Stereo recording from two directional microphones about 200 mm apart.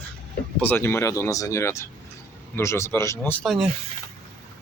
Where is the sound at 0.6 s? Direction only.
10° left (ahead or behind).